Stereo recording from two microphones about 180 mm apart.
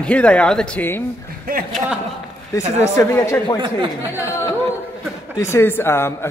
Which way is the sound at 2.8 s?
15° left (ahead or behind).